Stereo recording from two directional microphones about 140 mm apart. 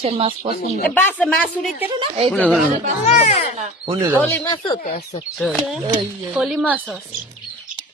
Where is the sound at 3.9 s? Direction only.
25° right (ahead or behind).